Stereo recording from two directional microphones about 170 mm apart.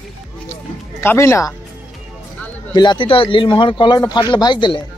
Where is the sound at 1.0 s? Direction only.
15° left (ahead or behind).